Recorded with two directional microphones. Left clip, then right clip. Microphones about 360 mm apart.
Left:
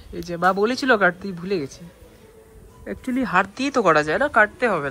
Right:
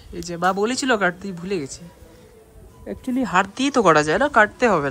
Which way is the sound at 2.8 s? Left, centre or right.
Centre.